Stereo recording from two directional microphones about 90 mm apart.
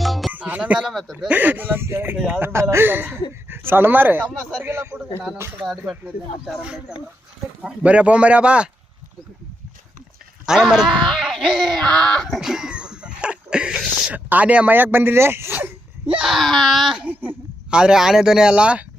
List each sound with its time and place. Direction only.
0.0 s music: centre (ahead or behind)
0.3 s music: 20° right (ahead or behind)
0.8 s speech: centre (ahead or behind)
1.3 s speech: 20° right (ahead or behind)
4.6 s a sound: 30° right (ahead or behind)
6.4 s speech: 10° right (ahead or behind)
10.4 s speech: 5° right (ahead or behind)
11.8 s speech: 5° left (ahead or behind); by 15.7 s 25° right (ahead or behind)
16.1 s speech: 5° right (ahead or behind)
17.1 s a sound: 20° right (ahead or behind)
17.7 s speech: 5° right (ahead or behind)